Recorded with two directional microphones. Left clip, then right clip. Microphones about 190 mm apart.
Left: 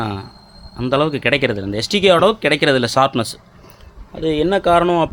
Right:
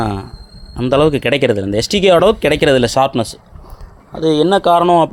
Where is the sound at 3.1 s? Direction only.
Centre (ahead or behind).